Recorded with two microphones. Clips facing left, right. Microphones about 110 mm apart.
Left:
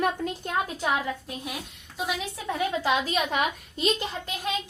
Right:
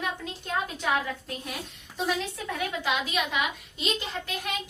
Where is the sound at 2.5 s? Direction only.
25° left (ahead or behind).